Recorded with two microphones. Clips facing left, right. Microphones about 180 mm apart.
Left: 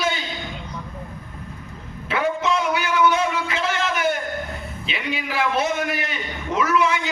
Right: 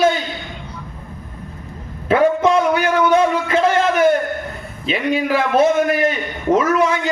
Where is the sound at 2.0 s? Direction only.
50° right (ahead or behind).